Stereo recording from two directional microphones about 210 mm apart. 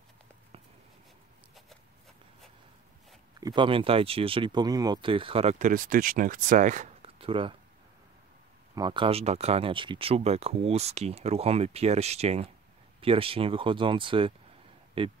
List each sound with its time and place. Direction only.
3.3 s speech: 20° right (ahead or behind)
8.7 s speech: 20° right (ahead or behind)